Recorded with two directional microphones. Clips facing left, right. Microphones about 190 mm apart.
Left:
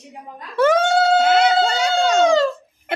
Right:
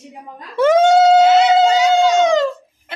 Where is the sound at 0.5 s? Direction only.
20° right (ahead or behind).